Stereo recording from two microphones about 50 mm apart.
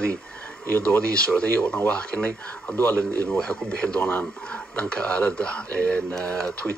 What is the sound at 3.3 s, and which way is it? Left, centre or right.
Speech, left.